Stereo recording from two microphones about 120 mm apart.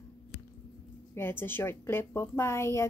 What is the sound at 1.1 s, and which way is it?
A woman's voice, 20° left (ahead or behind).